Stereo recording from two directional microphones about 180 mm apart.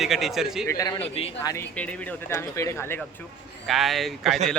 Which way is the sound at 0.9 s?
30° left (ahead or behind).